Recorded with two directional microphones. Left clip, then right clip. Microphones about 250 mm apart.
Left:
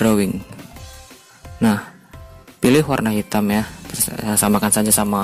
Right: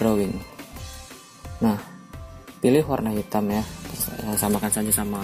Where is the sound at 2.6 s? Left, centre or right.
Left.